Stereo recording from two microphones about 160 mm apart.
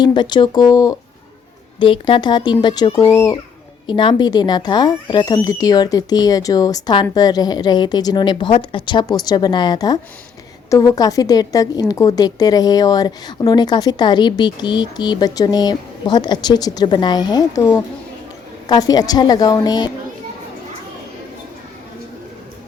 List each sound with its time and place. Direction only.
0.0 s a woman's voice: 25° left (ahead or behind)
1.8 s a woman's voice: 30° left (ahead or behind)
3.1 s speech: 15° left (ahead or behind)
3.8 s a woman's voice: 30° left (ahead or behind)